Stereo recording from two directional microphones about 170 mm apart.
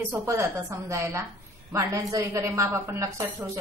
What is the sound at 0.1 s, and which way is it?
A woman's voice, 15° right (ahead or behind).